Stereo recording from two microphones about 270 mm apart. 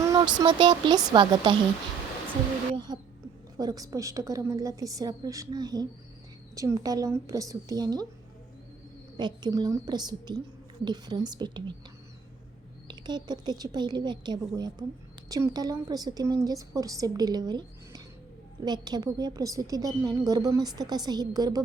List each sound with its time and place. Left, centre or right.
0.1 s a woman's voice: centre
2.7 s a woman's voice: centre
9.1 s a woman's voice: centre
12.9 s a woman's voice: centre